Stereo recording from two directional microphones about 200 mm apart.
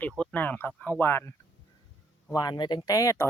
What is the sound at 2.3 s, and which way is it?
Speech, 20° left (ahead or behind).